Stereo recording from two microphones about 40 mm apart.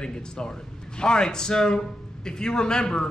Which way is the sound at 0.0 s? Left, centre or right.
Left.